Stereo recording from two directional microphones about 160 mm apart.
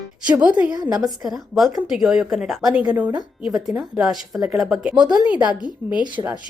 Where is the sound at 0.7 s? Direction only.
25° right (ahead or behind).